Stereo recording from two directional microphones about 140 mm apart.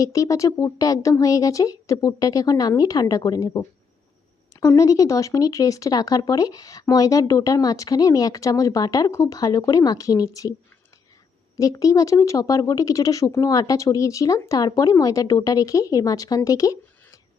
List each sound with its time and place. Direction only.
0.0 s speech: 25° left (ahead or behind)
11.5 s speech: 25° left (ahead or behind)